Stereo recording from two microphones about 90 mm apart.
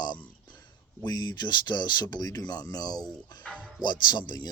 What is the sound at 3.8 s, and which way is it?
Speech, 55° left (ahead or behind).